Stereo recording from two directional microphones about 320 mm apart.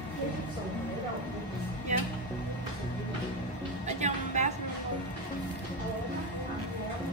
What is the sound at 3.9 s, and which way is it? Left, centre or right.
Music, right.